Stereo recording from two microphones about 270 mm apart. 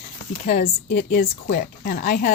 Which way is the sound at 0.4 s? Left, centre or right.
Left.